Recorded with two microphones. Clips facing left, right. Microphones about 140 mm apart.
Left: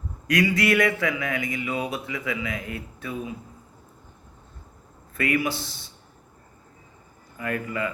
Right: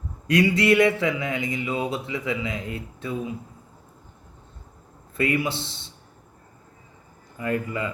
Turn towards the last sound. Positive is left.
turn(degrees=-25)  # may be behind; listen again after turning